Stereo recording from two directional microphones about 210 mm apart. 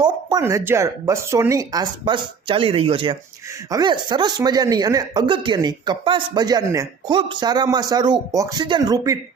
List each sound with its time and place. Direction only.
0.0 s speech: 20° right (ahead or behind)